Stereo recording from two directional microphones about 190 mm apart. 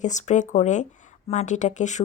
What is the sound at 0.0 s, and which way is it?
Speech, 40° left (ahead or behind).